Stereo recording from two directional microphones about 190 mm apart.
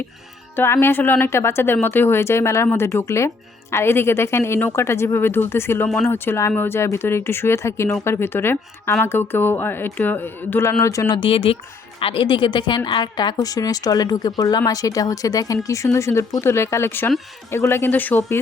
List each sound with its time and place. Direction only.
0.5 s a woman's voice: 10° left (ahead or behind)